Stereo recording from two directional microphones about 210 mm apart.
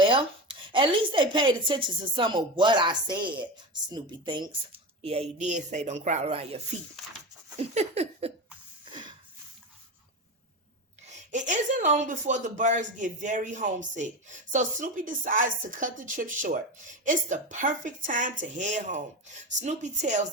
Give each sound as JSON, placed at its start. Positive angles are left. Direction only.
{"t": 0.1, "sound": "a woman's voice", "side_deg": -25}
{"t": 7.6, "sound": "a woman's voice", "side_deg": -30}
{"t": 8.8, "sound": "a sound", "side_deg": -20}
{"t": 11.0, "sound": "a woman's voice", "side_deg": -35}